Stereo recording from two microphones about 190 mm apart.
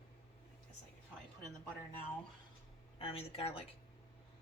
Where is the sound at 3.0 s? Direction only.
30° left (ahead or behind).